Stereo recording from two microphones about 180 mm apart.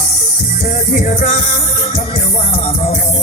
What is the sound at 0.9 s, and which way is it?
Music, 45° left (ahead or behind).